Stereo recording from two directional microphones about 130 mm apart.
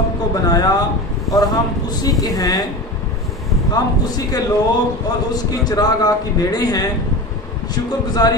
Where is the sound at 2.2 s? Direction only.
30° left (ahead or behind).